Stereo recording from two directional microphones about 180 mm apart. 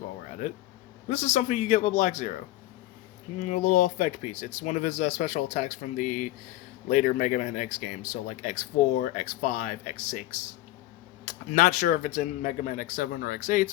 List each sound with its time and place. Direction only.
1.0 s speech: 40° left (ahead or behind)
3.4 s speech: 40° left (ahead or behind)
11.5 s speech: 45° left (ahead or behind)